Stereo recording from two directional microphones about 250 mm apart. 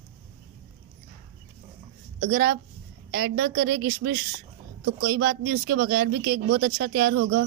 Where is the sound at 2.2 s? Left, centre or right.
Right.